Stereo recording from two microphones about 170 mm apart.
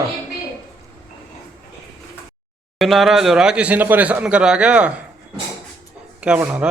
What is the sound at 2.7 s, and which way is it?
Speech, centre (ahead or behind).